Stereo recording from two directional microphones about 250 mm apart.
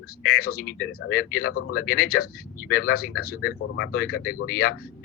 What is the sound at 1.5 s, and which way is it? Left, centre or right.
Speech, left.